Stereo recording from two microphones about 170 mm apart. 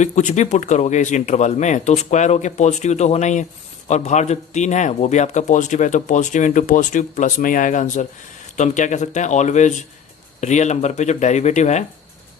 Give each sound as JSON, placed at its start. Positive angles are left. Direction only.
{"t": 0.0, "sound": "speech", "side_deg": 45}